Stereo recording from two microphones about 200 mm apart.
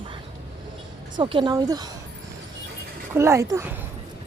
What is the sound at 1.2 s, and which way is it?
Speech, 25° right (ahead or behind).